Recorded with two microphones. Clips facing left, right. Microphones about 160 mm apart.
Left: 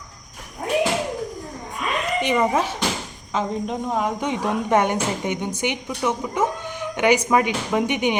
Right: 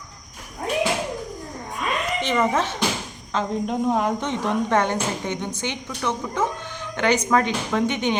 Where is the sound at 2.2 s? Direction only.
15° left (ahead or behind).